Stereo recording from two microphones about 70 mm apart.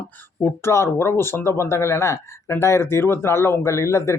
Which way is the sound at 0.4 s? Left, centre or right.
Left.